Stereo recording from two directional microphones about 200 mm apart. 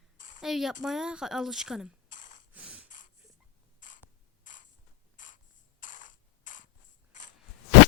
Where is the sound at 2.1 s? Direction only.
40° left (ahead or behind).